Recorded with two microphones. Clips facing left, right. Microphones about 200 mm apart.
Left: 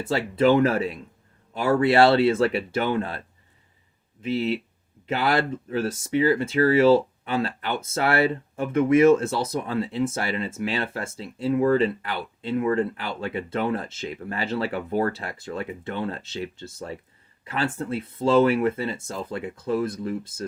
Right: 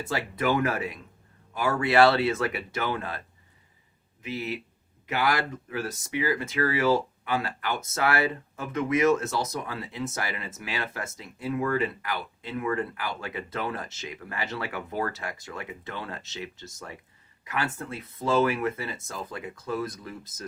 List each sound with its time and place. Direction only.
0.1 s speech: 30° left (ahead or behind)